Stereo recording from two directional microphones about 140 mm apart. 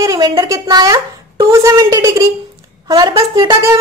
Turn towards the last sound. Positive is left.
turn(degrees=-30)  # may be behind; listen again after turning